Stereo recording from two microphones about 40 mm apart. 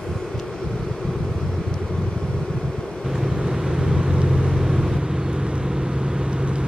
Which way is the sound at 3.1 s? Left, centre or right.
Centre.